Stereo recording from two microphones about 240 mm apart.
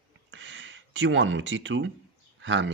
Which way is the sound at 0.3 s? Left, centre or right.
Right.